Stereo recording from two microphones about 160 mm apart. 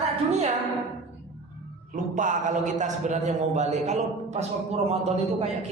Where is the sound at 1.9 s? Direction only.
50° right (ahead or behind).